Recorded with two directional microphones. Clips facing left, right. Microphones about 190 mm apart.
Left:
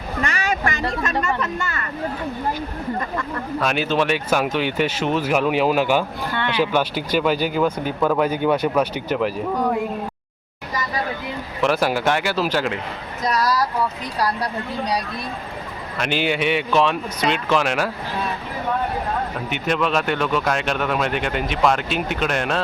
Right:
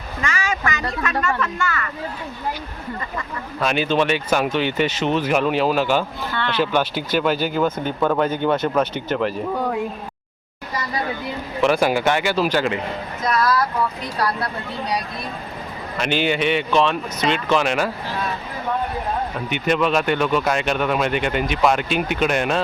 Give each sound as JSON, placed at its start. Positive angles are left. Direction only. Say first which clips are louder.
{"t": 0.2, "sound": "a sound", "louder": "left 1 dB", "side_deg": 60}
{"t": 1.2, "sound": "speech", "louder": "right 1 dB", "side_deg": 20}
{"t": 3.6, "sound": "speech", "louder": "right 2 dB", "side_deg": 0}
{"t": 11.6, "sound": "speech", "louder": "right 2 dB", "side_deg": 0}
{"t": 13.3, "sound": "speech", "louder": "right 1 dB", "side_deg": 35}
{"t": 16.0, "sound": "speech", "louder": "right 1 dB", "side_deg": 5}
{"t": 19.5, "sound": "speech", "louder": "right 3 dB", "side_deg": 0}